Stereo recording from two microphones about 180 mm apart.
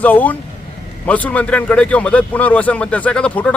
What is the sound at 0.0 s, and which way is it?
A man's voice, 10° left (ahead or behind).